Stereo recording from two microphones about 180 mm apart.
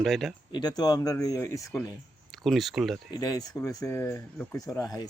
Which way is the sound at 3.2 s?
20° left (ahead or behind).